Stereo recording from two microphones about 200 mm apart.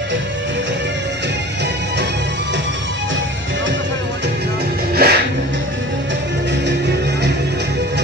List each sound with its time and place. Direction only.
5.0 s music: 50° right (ahead or behind)